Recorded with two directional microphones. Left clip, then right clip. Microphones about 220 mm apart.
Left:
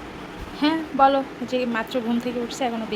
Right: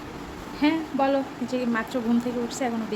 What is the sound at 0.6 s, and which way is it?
Speech, 10° right (ahead or behind).